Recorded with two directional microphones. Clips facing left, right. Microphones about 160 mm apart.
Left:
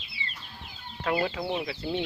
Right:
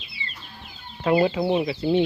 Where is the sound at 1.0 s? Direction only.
20° right (ahead or behind).